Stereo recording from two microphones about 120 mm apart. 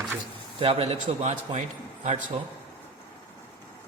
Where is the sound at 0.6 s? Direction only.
55° right (ahead or behind); by 1.6 s 75° right (ahead or behind).